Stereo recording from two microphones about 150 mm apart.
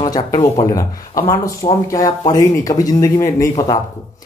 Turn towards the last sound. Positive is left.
turn(degrees=20)  # may be behind; listen again after turning